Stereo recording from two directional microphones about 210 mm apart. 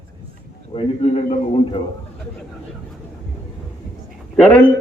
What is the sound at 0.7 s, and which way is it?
A man's voice, 25° left (ahead or behind).